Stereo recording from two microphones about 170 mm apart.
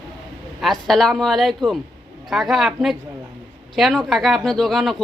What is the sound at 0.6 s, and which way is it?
A woman's voice, centre (ahead or behind).